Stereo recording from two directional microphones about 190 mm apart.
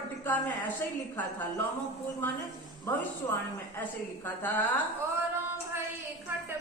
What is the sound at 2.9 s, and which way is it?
A woman's voice, 10° left (ahead or behind).